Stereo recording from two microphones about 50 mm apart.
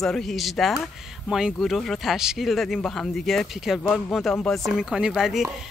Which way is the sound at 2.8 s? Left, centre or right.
Centre.